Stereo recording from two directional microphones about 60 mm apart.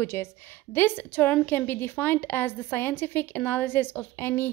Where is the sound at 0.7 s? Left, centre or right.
Left.